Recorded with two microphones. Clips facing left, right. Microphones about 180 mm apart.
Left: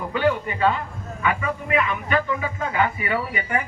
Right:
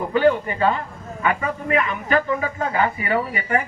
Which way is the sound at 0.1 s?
35° right (ahead or behind).